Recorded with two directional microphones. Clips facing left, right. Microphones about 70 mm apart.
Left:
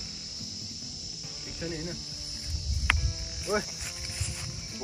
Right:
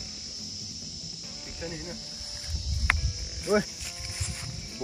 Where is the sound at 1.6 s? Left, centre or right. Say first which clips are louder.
Left 2 dB; centre.